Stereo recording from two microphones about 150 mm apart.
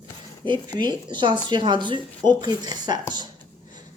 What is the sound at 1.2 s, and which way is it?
A woman's voice, 30° right (ahead or behind).